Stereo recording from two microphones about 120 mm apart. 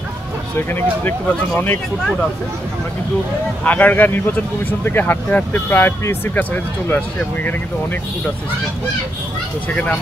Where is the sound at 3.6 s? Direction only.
15° left (ahead or behind).